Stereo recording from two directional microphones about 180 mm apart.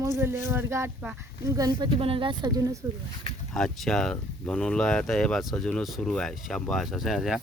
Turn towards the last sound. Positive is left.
turn(degrees=0)  # may be behind; listen again after turning